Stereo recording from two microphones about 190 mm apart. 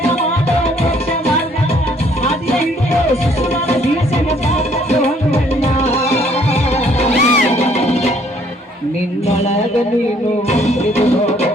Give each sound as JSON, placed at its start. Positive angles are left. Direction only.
{"t": 4.5, "sound": "music", "side_deg": 35}
{"t": 9.2, "sound": "music", "side_deg": 35}